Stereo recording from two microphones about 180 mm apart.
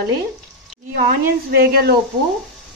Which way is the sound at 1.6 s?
60° right (ahead or behind).